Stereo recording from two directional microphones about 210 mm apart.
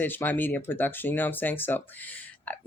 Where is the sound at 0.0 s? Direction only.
10° left (ahead or behind).